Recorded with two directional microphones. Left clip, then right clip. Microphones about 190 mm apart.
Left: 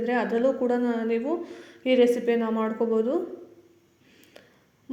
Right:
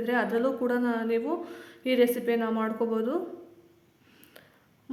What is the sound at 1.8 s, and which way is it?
Speech, 30° right (ahead or behind).